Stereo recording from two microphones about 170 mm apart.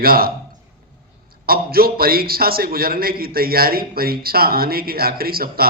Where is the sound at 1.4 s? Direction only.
60° right (ahead or behind).